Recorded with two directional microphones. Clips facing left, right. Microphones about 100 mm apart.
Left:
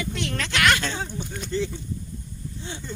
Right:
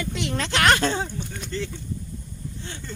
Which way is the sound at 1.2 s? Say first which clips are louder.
Left 1 dB; centre (ahead or behind).